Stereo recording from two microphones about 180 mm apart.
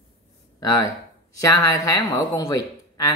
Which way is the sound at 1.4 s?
20° left (ahead or behind).